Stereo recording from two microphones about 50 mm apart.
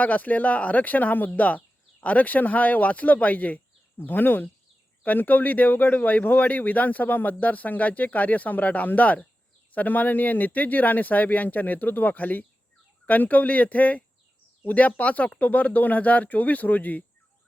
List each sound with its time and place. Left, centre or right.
0.0 s speech: left